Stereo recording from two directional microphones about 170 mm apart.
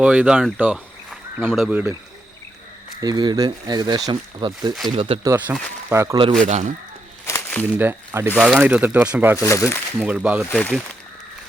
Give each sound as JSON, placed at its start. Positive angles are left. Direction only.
{"t": 0.0, "sound": "speech", "side_deg": -5}
{"t": 0.4, "sound": "a sound", "side_deg": -5}
{"t": 1.5, "sound": "speech", "side_deg": -5}
{"t": 3.0, "sound": "speech", "side_deg": -25}
{"t": 5.2, "sound": "speech", "side_deg": -15}
{"t": 6.4, "sound": "speech", "side_deg": -45}
{"t": 7.3, "sound": "a sound", "side_deg": 15}
{"t": 7.8, "sound": "speech", "side_deg": -15}
{"t": 8.4, "sound": "speech", "side_deg": 0}
{"t": 9.4, "sound": "speech", "side_deg": 15}
{"t": 10.0, "sound": "speech", "side_deg": -10}